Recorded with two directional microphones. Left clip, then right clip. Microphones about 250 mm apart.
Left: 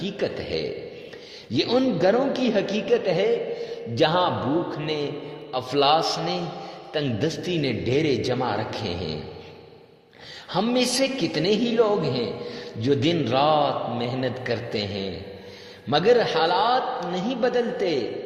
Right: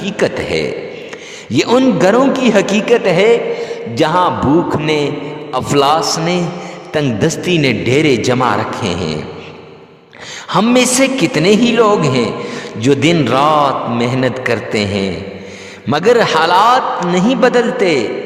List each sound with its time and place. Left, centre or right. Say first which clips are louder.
0.0 s a man's voice: right 12 dB; right
10.5 s a man's voice: right 11 dB; right